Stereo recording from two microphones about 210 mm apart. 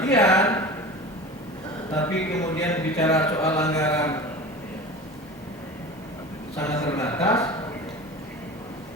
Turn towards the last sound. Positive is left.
turn(degrees=15)  # may be behind; listen again after turning